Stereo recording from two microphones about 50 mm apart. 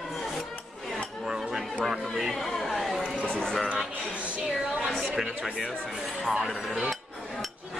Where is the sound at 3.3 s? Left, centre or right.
Centre.